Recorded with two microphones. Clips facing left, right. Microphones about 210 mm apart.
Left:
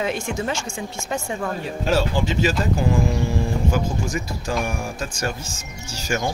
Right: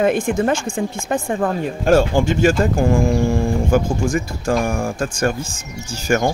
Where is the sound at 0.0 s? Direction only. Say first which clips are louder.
Right 8 dB; 55° right (ahead or behind).